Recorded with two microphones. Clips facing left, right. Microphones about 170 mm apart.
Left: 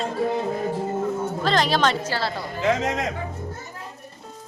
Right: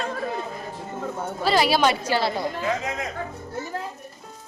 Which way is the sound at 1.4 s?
10° right (ahead or behind).